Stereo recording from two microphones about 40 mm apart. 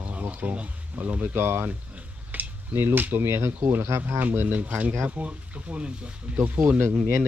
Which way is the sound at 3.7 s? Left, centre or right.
Right.